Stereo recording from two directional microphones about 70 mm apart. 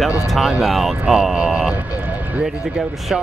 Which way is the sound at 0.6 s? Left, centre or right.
Centre.